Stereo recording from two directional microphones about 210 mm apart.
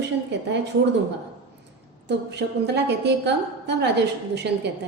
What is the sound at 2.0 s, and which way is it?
A woman's voice, 55° right (ahead or behind).